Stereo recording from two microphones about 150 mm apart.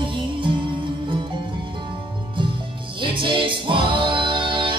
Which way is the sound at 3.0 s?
35° right (ahead or behind).